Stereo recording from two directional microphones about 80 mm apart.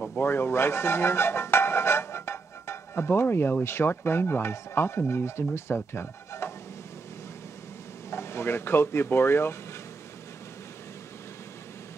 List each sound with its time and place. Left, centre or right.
0.2 s speech: left
5.8 s a sound: left
8.1 s speech: left